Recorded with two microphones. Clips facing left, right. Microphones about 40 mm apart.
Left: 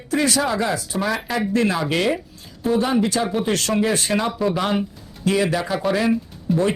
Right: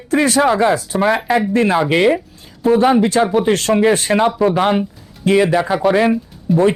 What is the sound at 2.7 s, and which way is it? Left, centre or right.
Speech, right.